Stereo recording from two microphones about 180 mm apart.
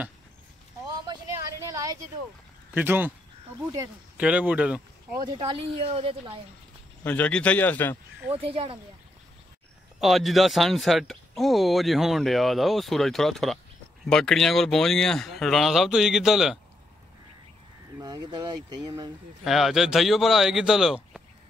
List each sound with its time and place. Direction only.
1.0 s a sound: 20° right (ahead or behind)
2.7 s speech: 10° right (ahead or behind)
4.2 s speech: 5° right (ahead or behind)
5.2 s speech: 25° right (ahead or behind)
7.0 s a man's voice: 5° left (ahead or behind)
8.3 s speech: 30° right (ahead or behind)
9.9 s speech: centre (ahead or behind)
18.0 s speech: 25° right (ahead or behind)
19.4 s speech: centre (ahead or behind)